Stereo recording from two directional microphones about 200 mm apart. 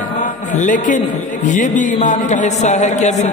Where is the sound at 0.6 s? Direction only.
40° left (ahead or behind).